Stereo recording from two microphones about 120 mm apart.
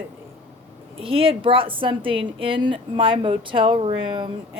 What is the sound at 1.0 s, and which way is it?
A woman's voice, 50° right (ahead or behind).